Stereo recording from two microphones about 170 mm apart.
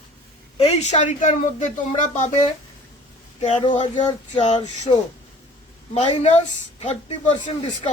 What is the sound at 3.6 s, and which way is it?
Child singing, 30° left (ahead or behind).